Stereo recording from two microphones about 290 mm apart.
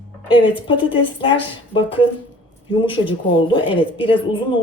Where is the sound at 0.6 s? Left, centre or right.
Centre.